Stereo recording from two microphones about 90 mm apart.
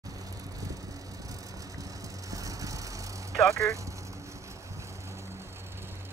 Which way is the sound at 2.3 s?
40° right (ahead or behind).